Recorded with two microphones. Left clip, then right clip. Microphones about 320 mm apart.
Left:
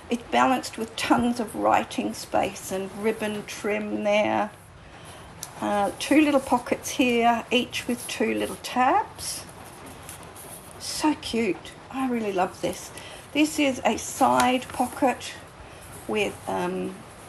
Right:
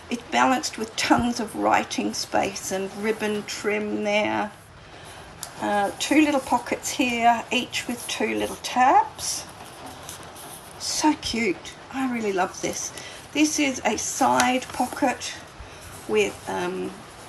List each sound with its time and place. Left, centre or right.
0.1 s a woman's voice: centre
10.8 s a woman's voice: centre